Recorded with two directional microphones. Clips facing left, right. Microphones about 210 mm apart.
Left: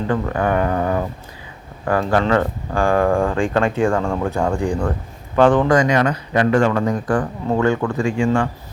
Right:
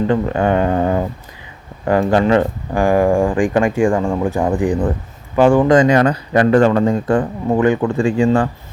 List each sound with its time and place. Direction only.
0.1 s speech: 25° right (ahead or behind)
5.7 s speech: 30° right (ahead or behind)